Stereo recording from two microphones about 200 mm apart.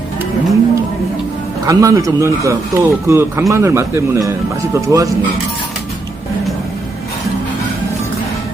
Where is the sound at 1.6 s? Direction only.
15° right (ahead or behind).